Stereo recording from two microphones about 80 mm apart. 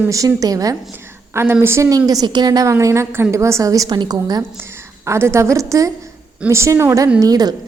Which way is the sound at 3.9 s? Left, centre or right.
Right.